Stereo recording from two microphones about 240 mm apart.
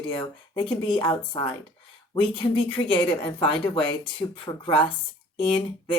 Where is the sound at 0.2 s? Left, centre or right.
Centre.